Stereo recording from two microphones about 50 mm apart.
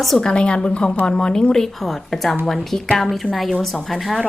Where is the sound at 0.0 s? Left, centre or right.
Centre.